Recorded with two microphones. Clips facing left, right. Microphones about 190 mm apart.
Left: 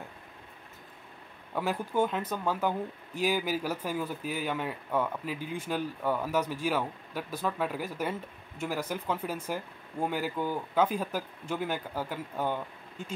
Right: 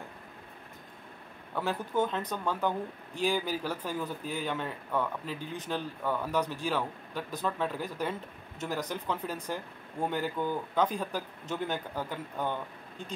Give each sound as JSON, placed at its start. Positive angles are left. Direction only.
{"t": 1.5, "sound": "speech", "side_deg": 10}